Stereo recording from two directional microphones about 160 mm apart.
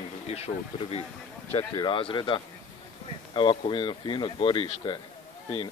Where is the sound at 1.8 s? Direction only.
35° left (ahead or behind).